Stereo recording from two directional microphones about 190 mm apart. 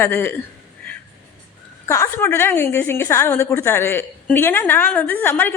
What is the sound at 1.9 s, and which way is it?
A woman's voice, 15° left (ahead or behind).